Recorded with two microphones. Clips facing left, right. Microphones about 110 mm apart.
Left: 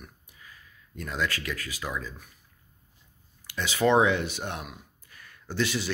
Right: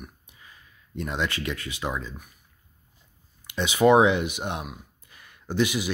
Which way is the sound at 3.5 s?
20° right (ahead or behind).